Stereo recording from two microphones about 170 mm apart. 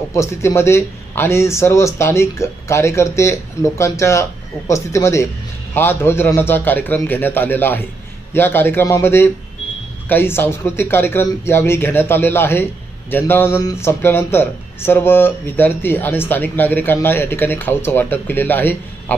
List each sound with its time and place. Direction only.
0.1 s speech: 15° left (ahead or behind)